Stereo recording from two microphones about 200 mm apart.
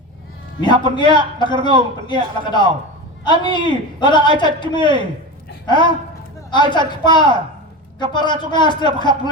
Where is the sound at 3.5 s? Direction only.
20° left (ahead or behind).